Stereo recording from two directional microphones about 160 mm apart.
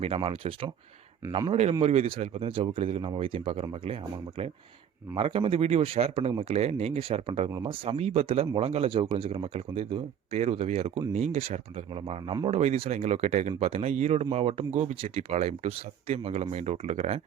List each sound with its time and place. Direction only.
0.0 s speech: 35° right (ahead or behind)
5.1 s speech: 35° right (ahead or behind)